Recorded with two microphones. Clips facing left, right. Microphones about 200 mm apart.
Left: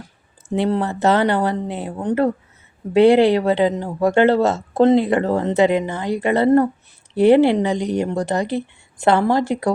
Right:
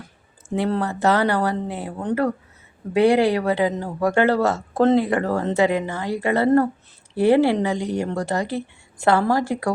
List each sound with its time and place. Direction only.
0.5 s speech: 25° left (ahead or behind)